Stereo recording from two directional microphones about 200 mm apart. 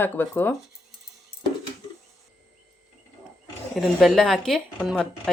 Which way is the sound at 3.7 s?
Centre (ahead or behind).